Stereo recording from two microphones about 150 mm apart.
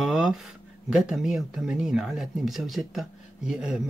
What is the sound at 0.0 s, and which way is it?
Speech, centre (ahead or behind).